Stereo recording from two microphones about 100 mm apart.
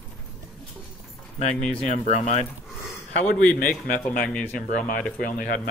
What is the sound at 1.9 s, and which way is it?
Speech, 90° left.